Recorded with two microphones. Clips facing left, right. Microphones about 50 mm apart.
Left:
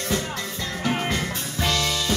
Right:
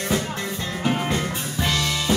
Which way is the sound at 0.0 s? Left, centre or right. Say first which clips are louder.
Right 2 dB; right.